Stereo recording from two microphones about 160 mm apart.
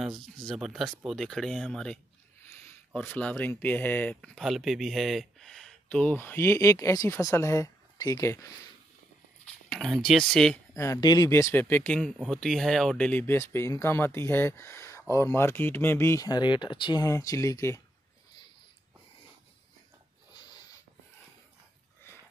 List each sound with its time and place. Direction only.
0.0 s speech: centre (ahead or behind); by 8.5 s 20° left (ahead or behind)
9.7 s speech: centre (ahead or behind)
10.7 s speech: 20° left (ahead or behind)
12.0 s speech: centre (ahead or behind); by 17.8 s 20° left (ahead or behind)